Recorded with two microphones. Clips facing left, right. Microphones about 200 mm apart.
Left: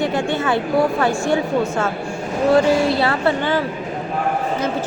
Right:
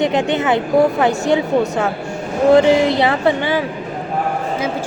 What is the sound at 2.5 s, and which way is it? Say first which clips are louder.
A woman's voice: right 3 dB; 20° right (ahead or behind).